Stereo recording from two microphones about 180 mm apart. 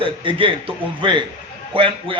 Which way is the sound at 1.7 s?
30° right (ahead or behind).